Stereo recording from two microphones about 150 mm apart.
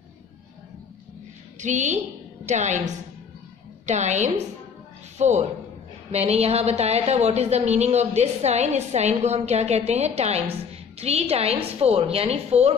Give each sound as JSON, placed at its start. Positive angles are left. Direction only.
{"t": 1.6, "sound": "a woman's voice", "side_deg": -55}